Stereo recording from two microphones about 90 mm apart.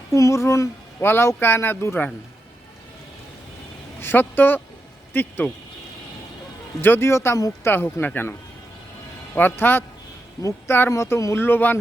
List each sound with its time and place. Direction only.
0.1 s speech: 35° left (ahead or behind)
4.0 s speech: 25° left (ahead or behind)
6.8 s speech: 25° left (ahead or behind)
7.6 s speech: 25° left (ahead or behind)